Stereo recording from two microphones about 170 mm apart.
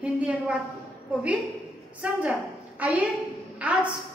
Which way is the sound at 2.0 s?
5° right (ahead or behind).